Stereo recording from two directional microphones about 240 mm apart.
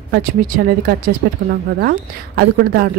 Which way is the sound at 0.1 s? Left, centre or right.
Right.